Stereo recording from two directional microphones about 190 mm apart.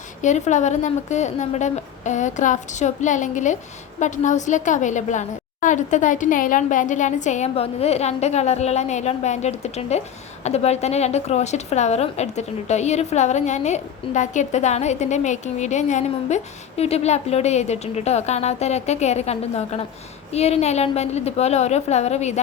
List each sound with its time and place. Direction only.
0.2 s a woman's voice: 40° left (ahead or behind)